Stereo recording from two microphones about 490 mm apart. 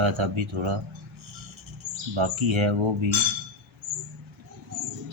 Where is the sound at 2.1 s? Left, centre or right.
Right.